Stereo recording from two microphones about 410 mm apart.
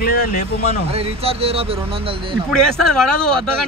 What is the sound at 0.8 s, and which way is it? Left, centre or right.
Speech, centre.